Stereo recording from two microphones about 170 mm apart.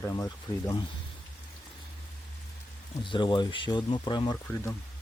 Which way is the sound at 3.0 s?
30° left (ahead or behind).